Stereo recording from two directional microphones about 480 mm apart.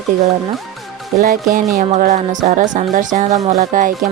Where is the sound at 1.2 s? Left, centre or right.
Centre.